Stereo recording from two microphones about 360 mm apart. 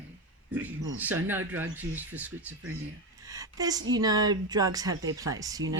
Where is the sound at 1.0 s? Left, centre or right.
Centre.